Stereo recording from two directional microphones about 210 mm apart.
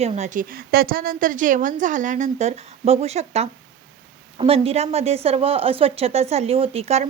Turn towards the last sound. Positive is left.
turn(degrees=-30)  # may be behind; listen again after turning